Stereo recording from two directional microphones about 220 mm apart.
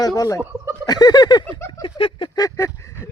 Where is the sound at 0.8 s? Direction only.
20° left (ahead or behind).